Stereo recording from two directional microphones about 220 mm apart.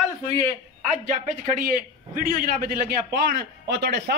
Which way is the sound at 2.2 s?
40° right (ahead or behind).